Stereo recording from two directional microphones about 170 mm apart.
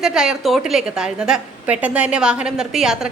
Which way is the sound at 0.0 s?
5° right (ahead or behind).